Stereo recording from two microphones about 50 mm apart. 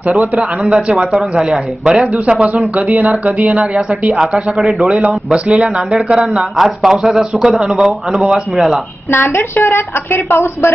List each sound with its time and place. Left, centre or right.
0.7 s speech: centre
2.4 s speech: right
4.1 s a man's voice: centre
4.8 s speech: right
6.5 s speech: centre
9.1 s a woman's voice: left